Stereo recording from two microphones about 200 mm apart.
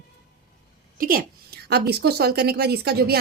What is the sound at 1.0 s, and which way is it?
Speech, 45° right (ahead or behind).